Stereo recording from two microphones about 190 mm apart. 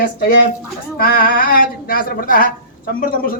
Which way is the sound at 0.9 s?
50° left (ahead or behind).